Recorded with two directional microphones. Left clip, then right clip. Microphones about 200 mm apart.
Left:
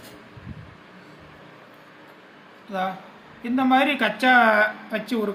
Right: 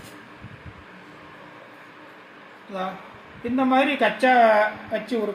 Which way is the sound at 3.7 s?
55° left (ahead or behind).